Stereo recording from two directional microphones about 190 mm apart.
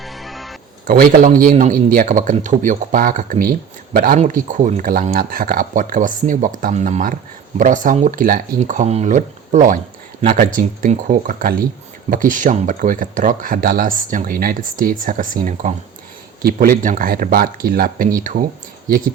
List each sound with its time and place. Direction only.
0.0 s music: centre (ahead or behind)
0.9 s speech: 50° right (ahead or behind)
16.4 s speech: 50° right (ahead or behind)